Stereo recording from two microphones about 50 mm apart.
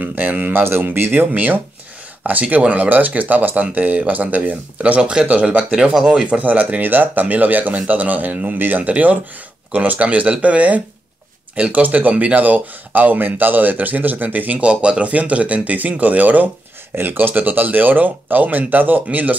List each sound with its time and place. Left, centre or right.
0.0 s speech: right
0.5 s speech: right
1.3 s speech: right
5.9 s speech: centre
6.3 s speech: right
14.6 s speech: right
16.9 s speech: right